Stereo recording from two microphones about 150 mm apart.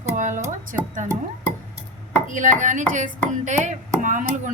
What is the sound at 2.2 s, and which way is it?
Chopping, 60° right (ahead or behind).